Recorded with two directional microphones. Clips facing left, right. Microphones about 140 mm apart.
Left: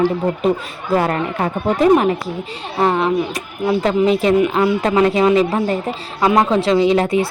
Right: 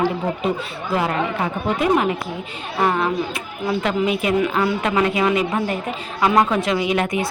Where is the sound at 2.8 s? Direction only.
30° left (ahead or behind).